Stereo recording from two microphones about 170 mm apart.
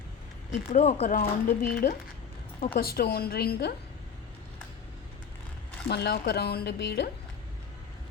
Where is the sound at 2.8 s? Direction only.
65° left (ahead or behind).